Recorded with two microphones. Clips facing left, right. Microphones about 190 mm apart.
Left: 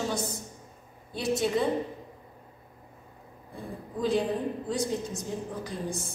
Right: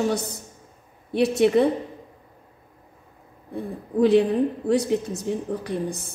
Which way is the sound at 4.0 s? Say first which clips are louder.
Right 9 dB; 65° right (ahead or behind).